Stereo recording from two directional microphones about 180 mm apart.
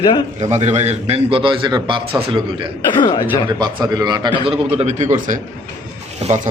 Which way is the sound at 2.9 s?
25° left (ahead or behind).